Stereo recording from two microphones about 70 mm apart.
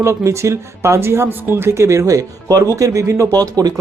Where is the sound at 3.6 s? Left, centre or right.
Right.